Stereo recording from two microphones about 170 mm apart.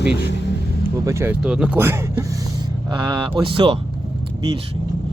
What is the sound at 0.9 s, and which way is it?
Speech, 15° right (ahead or behind).